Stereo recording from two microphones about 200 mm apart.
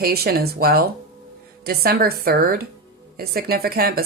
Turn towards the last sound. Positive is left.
turn(degrees=-50)  # may be behind; listen again after turning